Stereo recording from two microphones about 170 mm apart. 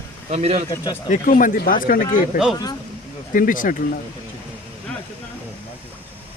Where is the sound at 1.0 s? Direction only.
50° left (ahead or behind).